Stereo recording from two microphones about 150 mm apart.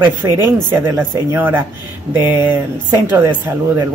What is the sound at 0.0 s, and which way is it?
Speech, 15° right (ahead or behind).